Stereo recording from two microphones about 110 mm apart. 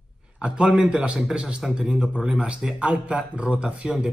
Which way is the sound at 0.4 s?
10° right (ahead or behind).